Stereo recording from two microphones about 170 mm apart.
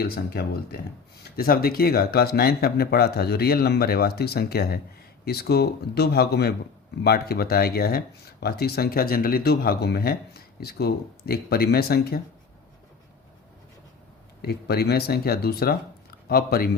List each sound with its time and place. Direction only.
0.0 s speech: 65° left (ahead or behind)
14.4 s speech: 70° left (ahead or behind)